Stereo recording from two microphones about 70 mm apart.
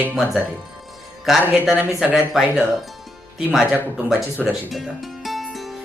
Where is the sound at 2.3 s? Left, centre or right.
Centre.